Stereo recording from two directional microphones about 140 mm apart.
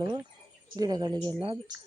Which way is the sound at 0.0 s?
25° right (ahead or behind).